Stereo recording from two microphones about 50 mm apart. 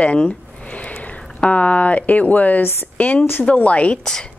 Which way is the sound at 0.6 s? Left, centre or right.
Left.